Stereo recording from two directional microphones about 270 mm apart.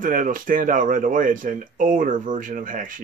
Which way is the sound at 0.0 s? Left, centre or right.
Right.